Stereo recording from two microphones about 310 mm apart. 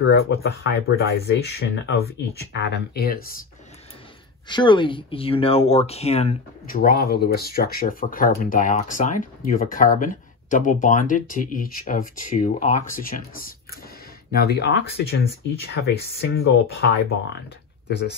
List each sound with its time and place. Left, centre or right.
0.0 s speech: left
4.5 s speech: centre; by 16.9 s left